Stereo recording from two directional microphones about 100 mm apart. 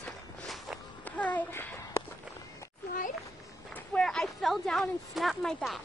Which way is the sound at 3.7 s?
10° left (ahead or behind).